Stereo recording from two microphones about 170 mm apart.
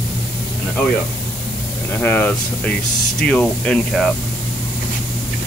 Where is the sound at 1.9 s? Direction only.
10° left (ahead or behind).